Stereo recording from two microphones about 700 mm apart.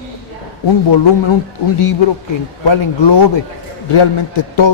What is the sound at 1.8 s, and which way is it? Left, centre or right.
A man's voice, left.